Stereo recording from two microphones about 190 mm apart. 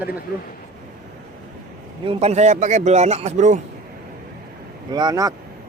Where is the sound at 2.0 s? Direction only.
35° right (ahead or behind).